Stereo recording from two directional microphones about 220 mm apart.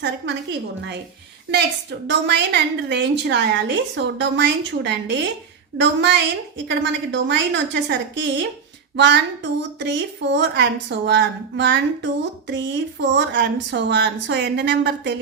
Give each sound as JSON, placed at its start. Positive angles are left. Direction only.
{"t": 1.5, "sound": "a woman's voice", "side_deg": -50}